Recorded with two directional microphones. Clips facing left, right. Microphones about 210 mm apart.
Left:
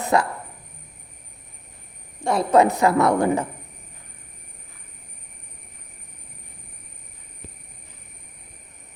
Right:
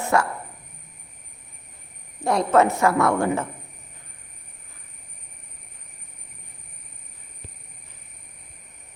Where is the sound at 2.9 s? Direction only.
40° left (ahead or behind).